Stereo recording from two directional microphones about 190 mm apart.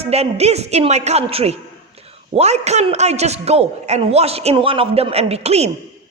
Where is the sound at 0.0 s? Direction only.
35° right (ahead or behind).